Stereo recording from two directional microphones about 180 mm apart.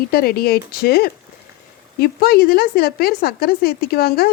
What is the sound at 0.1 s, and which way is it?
A woman's voice, 60° left (ahead or behind).